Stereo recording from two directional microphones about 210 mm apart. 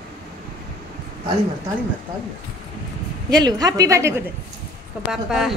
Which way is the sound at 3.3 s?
20° right (ahead or behind).